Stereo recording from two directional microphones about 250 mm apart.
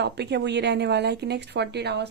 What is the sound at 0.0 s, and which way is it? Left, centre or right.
Speech, right.